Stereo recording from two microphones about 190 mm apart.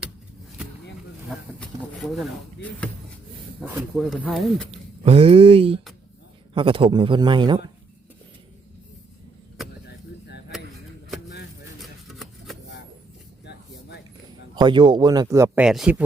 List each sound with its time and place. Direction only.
1.5 s a sound: 5° left (ahead or behind)
3.9 s speech: centre (ahead or behind)
4.7 s speech: 30° right (ahead or behind)
11.8 s music: centre (ahead or behind)
13.4 s a sound: 65° left (ahead or behind)
14.5 s speech: 25° right (ahead or behind)
15.6 s speech: 5° right (ahead or behind)